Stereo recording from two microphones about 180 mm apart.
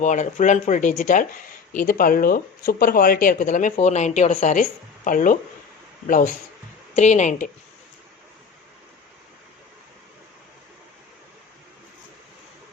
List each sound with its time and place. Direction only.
0.0 s a woman's voice: 45° left (ahead or behind)